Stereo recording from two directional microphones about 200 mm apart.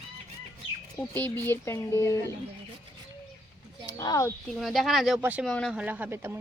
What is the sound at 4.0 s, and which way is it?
Speech, 15° left (ahead or behind).